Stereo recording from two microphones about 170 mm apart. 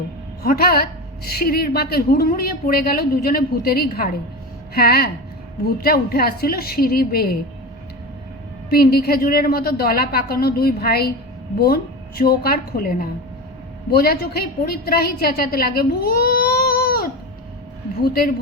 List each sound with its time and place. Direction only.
0.4 s a woman's voice: 65° left (ahead or behind)
8.7 s a woman's voice: 65° left (ahead or behind)